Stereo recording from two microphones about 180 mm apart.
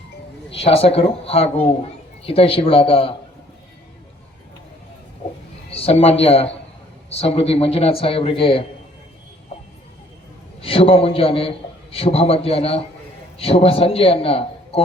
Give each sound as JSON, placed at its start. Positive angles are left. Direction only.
{"t": 0.5, "sound": "a man's voice", "side_deg": 35}
{"t": 5.7, "sound": "a man's voice", "side_deg": 35}
{"t": 9.5, "sound": "a sound", "side_deg": 35}
{"t": 10.6, "sound": "a man's voice", "side_deg": 30}